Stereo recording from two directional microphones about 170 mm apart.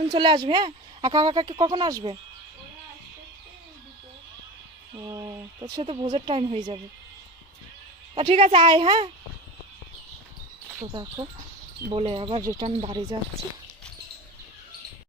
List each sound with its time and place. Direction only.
0.1 s speech: 30° right (ahead or behind)
5.0 s speech: 25° right (ahead or behind)
8.1 s a woman's voice: 35° right (ahead or behind)
11.9 s a woman's voice: 35° right (ahead or behind)
12.4 s speech: 20° right (ahead or behind)
12.6 s a woman's voice: 35° right (ahead or behind)